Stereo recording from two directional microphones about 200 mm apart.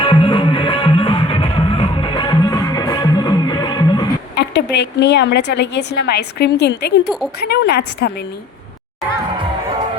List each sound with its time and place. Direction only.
0.0 s music: 25° left (ahead or behind)
4.4 s a woman's voice: 60° left (ahead or behind)